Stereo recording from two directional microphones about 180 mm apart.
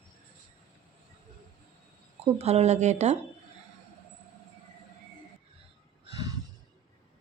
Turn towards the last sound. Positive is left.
turn(degrees=-25)  # may be behind; listen again after turning